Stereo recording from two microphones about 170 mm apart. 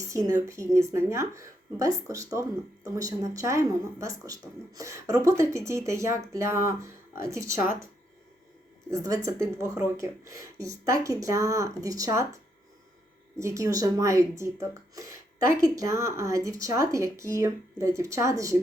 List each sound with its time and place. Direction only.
0.1 s speech: 20° right (ahead or behind)
8.9 s speech: 20° right (ahead or behind)
13.4 s speech: 15° right (ahead or behind)